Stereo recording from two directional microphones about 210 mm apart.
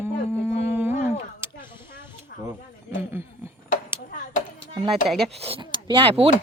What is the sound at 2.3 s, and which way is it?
Snake, 50° left (ahead or behind).